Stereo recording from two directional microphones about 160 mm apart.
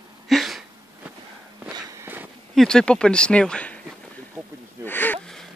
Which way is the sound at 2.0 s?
10° right (ahead or behind).